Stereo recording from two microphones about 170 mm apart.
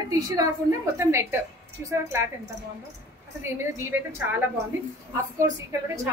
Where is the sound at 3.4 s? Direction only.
15° right (ahead or behind).